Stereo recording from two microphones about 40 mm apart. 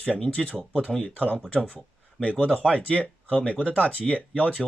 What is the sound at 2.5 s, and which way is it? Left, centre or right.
Speech, left.